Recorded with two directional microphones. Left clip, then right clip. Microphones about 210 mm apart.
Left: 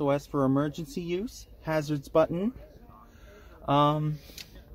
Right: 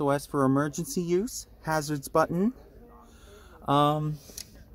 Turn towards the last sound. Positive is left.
turn(degrees=-40)  # may be behind; listen again after turning